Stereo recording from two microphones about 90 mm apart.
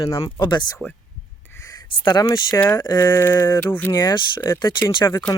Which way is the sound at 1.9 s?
55° left (ahead or behind).